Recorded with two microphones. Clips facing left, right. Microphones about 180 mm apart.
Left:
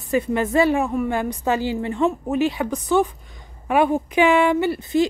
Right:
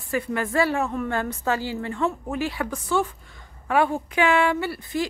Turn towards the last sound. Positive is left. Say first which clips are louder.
# left 7 dB
turn(degrees=20)  # may be behind; listen again after turning